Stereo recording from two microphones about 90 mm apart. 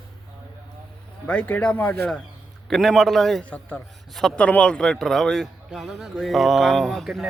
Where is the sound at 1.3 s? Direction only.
15° left (ahead or behind).